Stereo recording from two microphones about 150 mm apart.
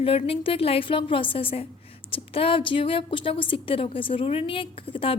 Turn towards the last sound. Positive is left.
turn(degrees=35)  # may be behind; listen again after turning